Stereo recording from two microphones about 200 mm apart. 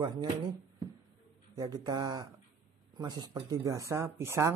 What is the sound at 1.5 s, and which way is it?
A man's voice, 20° right (ahead or behind).